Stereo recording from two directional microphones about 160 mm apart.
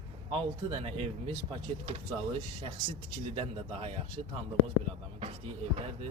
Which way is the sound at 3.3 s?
35° right (ahead or behind).